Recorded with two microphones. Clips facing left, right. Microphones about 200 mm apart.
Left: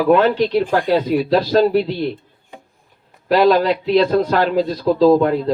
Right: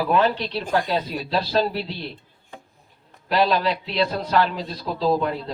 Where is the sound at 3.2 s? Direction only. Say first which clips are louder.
Left 7 dB; 45° left (ahead or behind).